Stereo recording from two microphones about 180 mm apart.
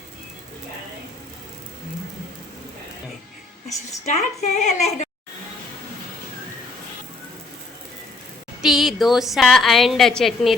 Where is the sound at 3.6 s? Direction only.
40° left (ahead or behind).